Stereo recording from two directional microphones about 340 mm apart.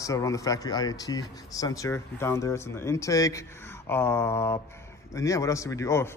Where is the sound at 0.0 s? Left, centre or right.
Centre.